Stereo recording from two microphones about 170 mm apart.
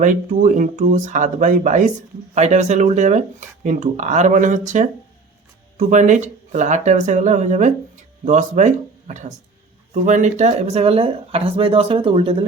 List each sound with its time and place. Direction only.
0.0 s speech: 45° right (ahead or behind)